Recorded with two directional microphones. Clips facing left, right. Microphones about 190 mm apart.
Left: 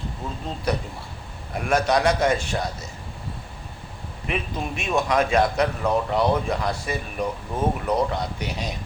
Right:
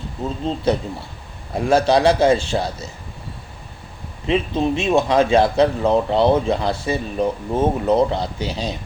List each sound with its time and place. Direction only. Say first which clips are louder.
0.4 s speech: right 7 dB; 25° right (ahead or behind)
4.3 s speech: right 9 dB; 25° right (ahead or behind)